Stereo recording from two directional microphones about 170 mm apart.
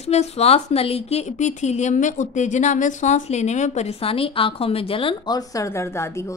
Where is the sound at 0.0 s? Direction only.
40° left (ahead or behind).